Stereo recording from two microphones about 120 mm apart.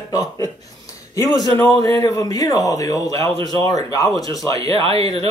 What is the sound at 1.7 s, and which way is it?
A man's voice, 25° left (ahead or behind).